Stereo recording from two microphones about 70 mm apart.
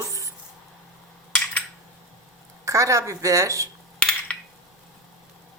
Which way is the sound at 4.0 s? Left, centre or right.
Centre.